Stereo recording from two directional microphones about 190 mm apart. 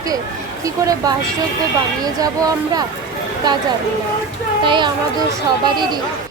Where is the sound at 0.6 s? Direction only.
15° right (ahead or behind).